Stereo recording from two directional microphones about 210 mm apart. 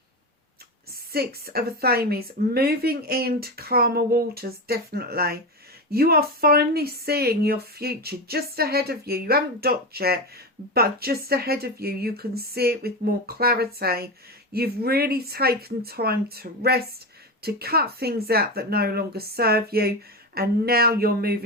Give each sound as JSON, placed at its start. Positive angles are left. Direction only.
{"t": 1.1, "sound": "speech", "side_deg": -45}